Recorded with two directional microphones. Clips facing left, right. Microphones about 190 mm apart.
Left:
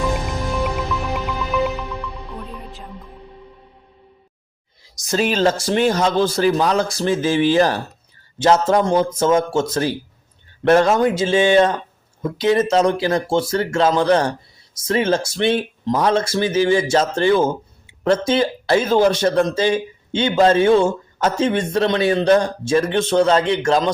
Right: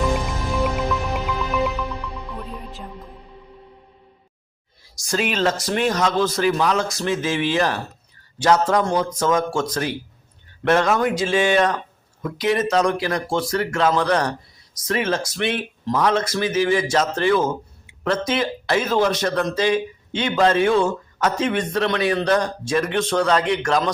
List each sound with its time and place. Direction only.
0.5 s music: centre (ahead or behind)
5.0 s speech: 30° left (ahead or behind)